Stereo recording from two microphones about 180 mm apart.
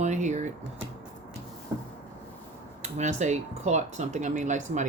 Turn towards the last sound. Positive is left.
turn(degrees=-40)  # may be behind; listen again after turning